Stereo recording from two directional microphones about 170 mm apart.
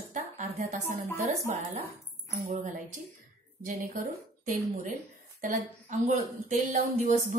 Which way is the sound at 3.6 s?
50° right (ahead or behind).